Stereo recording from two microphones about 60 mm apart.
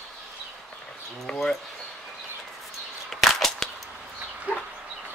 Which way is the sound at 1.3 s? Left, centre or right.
Centre.